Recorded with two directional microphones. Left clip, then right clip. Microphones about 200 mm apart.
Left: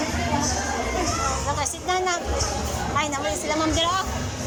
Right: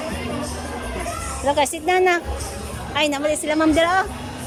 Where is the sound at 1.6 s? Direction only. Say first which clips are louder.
Right 9 dB; 45° right (ahead or behind).